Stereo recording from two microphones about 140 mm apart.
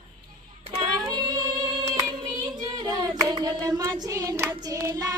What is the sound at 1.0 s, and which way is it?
Singing, 30° right (ahead or behind).